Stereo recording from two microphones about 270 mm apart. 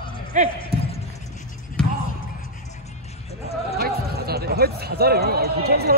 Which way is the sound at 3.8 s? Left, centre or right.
Right.